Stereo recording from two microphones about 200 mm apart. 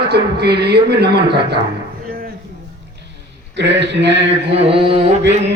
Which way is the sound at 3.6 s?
60° right (ahead or behind).